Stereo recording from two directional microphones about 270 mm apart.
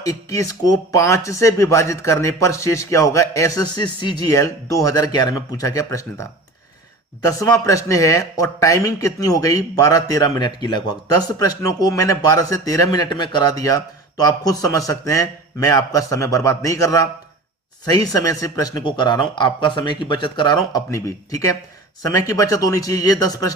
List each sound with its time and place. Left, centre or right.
0.0 s speech: centre